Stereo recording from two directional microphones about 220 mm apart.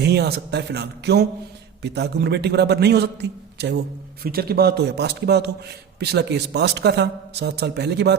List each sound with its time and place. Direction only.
0.0 s a man's voice: 50° right (ahead or behind)